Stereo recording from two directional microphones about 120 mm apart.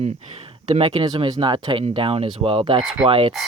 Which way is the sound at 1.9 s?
50° right (ahead or behind).